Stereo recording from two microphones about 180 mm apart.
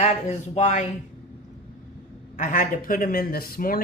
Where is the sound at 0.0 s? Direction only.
40° left (ahead or behind).